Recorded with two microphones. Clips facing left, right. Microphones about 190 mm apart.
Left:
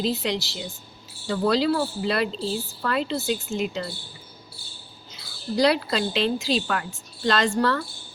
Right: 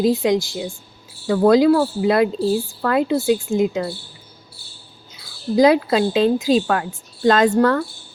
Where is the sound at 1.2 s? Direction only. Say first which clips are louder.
Right 9 dB; 55° right (ahead or behind).